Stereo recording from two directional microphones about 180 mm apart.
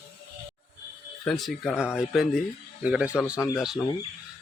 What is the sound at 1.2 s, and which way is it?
Speech, centre (ahead or behind).